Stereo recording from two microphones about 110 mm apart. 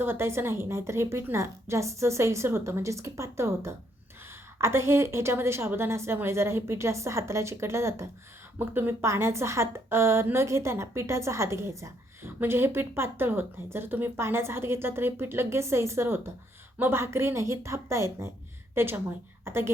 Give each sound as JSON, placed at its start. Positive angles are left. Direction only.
{"t": 0.0, "sound": "a woman's voice", "side_deg": -20}